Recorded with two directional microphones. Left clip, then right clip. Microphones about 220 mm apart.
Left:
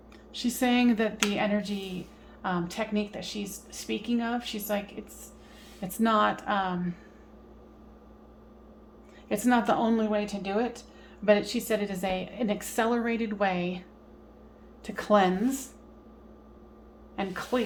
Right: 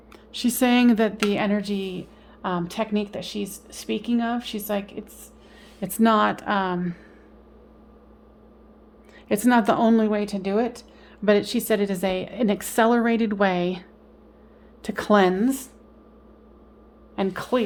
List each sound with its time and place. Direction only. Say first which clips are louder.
0.3 s speech: right 6 dB; 50° right (ahead or behind)
9.3 s speech: right 5 dB; 50° right (ahead or behind)
17.2 s speech: right 6 dB; 50° right (ahead or behind)